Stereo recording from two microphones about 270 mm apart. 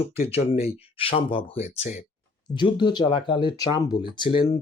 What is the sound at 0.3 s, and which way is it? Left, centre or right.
Speech, left.